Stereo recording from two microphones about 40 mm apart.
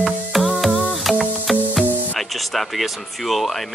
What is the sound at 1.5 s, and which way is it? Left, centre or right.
Speech, centre.